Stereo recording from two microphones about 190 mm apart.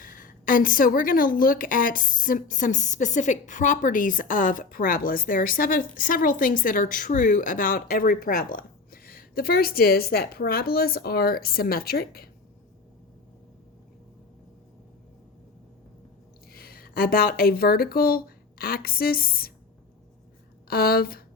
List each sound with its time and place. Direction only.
0.0 s a woman's voice: 45° left (ahead or behind)
16.5 s speech: 55° left (ahead or behind)
20.7 s a woman's voice: 55° left (ahead or behind)